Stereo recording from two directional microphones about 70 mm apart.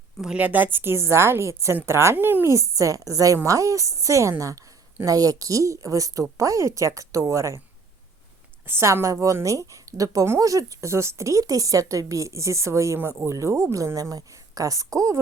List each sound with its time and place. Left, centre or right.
0.3 s a woman's voice: right
2.1 s a woman's voice: right
2.5 s speech: right
5.0 s a woman's voice: right
8.6 s speech: right